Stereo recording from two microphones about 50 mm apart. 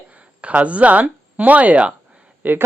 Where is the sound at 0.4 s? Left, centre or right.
Right.